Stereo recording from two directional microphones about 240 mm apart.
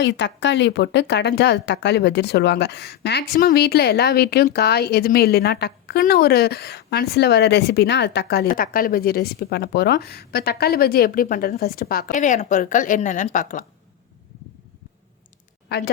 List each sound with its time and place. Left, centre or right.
0.0 s a woman's voice: left